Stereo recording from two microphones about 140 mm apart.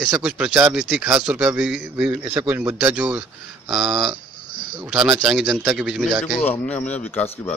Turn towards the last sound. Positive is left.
turn(degrees=10)  # may be behind; listen again after turning